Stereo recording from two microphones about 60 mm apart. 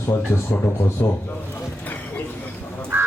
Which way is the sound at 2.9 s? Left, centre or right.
Right.